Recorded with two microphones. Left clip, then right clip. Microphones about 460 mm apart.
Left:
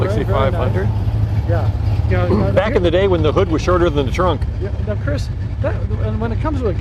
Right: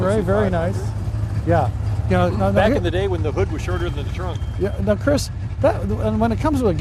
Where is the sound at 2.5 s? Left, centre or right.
Left.